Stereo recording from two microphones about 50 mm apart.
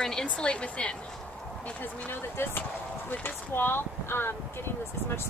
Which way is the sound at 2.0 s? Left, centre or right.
Left.